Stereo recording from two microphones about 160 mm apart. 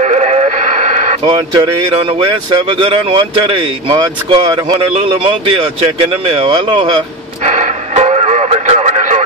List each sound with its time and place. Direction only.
0.0 s radio: 45° right (ahead or behind)
1.2 s speech: 30° right (ahead or behind)
7.4 s radio: 50° right (ahead or behind)